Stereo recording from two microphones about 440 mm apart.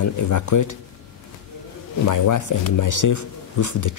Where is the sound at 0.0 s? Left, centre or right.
Left.